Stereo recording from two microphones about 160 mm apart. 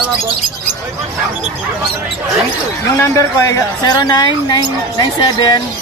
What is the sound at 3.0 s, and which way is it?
Speech, 20° left (ahead or behind).